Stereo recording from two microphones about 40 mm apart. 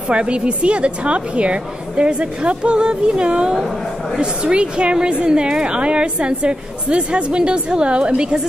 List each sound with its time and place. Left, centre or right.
0.1 s a woman's voice: right